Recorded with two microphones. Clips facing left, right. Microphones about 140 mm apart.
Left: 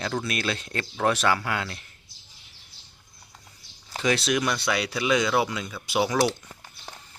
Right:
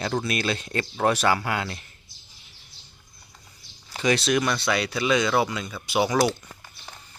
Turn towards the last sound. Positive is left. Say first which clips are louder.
# right 1 dB
turn(degrees=0)  # may be behind; listen again after turning